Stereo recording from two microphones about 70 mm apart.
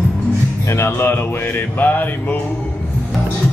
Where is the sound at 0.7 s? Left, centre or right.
Left.